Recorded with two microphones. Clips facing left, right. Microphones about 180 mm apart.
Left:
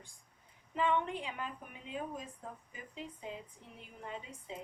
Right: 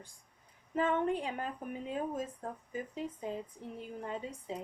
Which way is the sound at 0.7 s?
45° right (ahead or behind).